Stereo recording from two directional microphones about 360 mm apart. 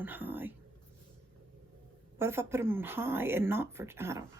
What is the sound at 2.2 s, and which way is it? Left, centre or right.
Speech, centre.